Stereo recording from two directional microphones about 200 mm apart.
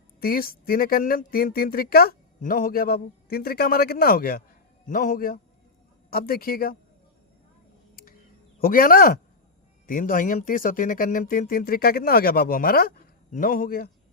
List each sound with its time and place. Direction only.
0.2 s speech: 50° left (ahead or behind)
8.6 s speech: 45° left (ahead or behind)